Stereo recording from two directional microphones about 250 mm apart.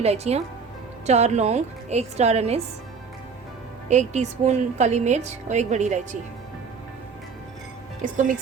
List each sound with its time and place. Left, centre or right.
0.0 s a woman's voice: right
3.8 s a woman's voice: right
8.0 s speech: right